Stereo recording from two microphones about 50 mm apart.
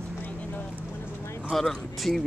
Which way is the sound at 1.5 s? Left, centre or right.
Centre.